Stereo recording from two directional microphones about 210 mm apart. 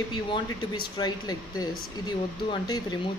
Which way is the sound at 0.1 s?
20° left (ahead or behind).